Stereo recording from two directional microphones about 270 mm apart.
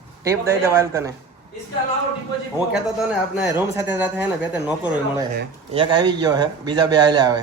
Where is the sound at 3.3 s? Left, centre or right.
Centre.